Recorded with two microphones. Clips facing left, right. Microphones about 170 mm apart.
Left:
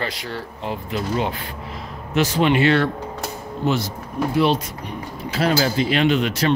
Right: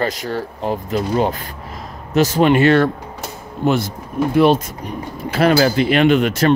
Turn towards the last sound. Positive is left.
turn(degrees=-50)  # may be behind; listen again after turning